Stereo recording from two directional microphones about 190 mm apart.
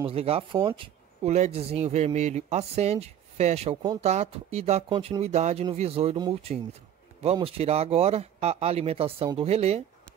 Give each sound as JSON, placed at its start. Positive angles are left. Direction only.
{"t": 0.0, "sound": "speech", "side_deg": -30}